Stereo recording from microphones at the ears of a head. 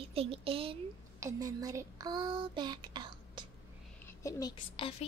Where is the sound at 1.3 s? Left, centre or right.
Right.